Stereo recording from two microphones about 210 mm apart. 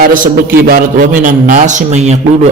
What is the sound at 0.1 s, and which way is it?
A man's voice, 40° right (ahead or behind).